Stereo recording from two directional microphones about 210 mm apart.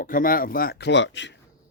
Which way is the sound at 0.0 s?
40° left (ahead or behind).